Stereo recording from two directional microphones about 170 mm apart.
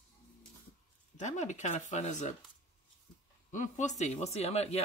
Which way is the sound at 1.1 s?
45° left (ahead or behind).